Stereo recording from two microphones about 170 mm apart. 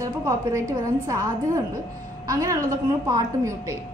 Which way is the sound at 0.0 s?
20° right (ahead or behind).